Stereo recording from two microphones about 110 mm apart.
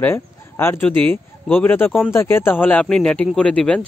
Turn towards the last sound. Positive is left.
turn(degrees=10)  # may be behind; listen again after turning